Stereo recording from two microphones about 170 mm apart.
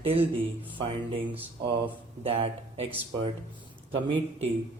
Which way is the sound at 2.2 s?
35° right (ahead or behind).